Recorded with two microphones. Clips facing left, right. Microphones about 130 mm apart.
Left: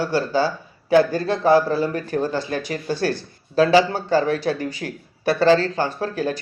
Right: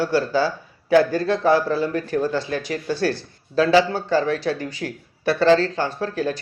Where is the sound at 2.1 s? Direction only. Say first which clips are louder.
Right 1 dB; 30° left (ahead or behind).